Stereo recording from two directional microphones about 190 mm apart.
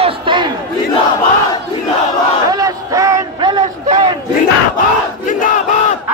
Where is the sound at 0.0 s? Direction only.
25° right (ahead or behind).